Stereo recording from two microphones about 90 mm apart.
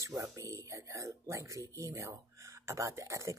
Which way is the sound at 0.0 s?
35° right (ahead or behind).